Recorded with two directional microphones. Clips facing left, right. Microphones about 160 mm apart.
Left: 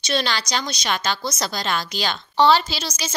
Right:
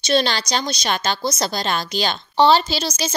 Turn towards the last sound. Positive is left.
turn(degrees=-30)  # may be behind; listen again after turning